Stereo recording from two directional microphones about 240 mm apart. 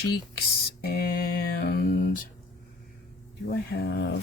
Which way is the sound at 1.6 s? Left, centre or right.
Left.